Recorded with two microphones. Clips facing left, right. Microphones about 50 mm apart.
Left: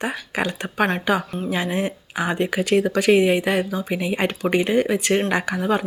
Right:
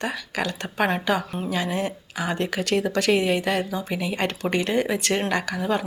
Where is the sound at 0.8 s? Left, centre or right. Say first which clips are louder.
Left 2 dB; centre.